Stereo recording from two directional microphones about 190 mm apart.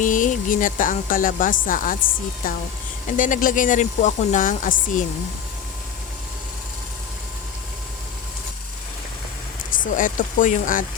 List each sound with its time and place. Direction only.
0.0 s speech: 45° left (ahead or behind)
9.7 s speech: 45° left (ahead or behind)